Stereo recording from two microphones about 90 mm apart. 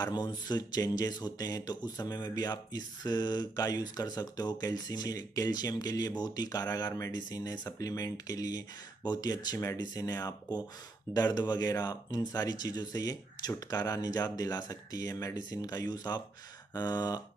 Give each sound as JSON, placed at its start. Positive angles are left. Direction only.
{"t": 0.0, "sound": "speech", "side_deg": 50}